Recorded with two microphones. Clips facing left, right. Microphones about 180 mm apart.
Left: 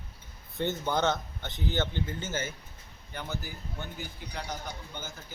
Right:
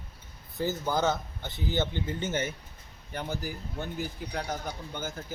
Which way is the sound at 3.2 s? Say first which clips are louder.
Right 4 dB; 35° right (ahead or behind).